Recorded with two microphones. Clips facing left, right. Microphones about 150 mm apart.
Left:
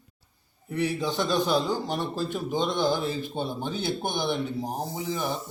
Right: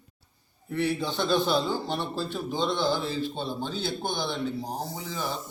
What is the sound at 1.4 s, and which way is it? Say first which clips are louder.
Speech: left 1 dB; 45° left (ahead or behind).